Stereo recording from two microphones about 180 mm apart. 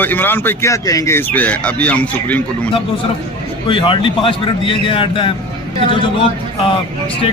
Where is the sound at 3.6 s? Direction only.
30° left (ahead or behind).